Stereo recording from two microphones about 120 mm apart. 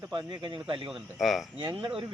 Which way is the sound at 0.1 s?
40° right (ahead or behind).